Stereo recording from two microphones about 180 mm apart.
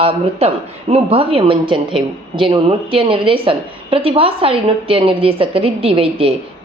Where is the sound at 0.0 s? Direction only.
35° right (ahead or behind).